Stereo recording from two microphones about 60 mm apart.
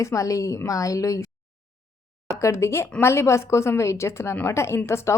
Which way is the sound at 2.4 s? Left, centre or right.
Left.